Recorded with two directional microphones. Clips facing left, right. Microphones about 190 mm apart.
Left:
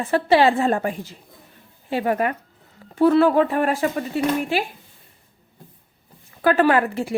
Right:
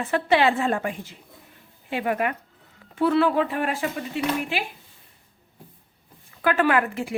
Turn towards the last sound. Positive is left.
turn(degrees=35)  # may be behind; listen again after turning